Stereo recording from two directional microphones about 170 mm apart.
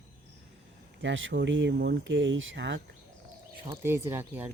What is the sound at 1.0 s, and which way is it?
Speech, 90° right.